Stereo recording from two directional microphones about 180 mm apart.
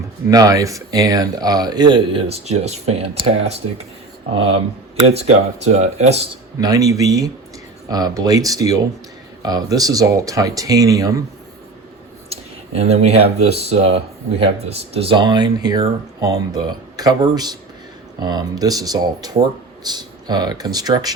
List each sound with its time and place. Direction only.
0.3 s speech: 20° right (ahead or behind); by 6.2 s 35° right (ahead or behind)
6.6 s speech: 20° right (ahead or behind)
12.3 s speech: 35° right (ahead or behind)
17.0 s speech: 20° right (ahead or behind)